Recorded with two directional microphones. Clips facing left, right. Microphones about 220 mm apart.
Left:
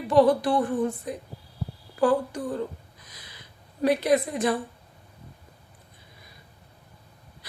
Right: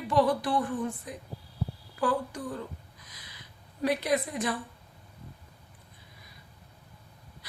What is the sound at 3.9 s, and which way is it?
Speech, 30° left (ahead or behind).